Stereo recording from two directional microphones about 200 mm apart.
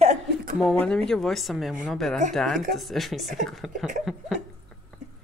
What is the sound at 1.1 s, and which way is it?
Speech, centre (ahead or behind).